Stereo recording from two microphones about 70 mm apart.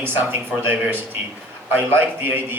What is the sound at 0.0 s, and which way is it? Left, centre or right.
A man's voice, right.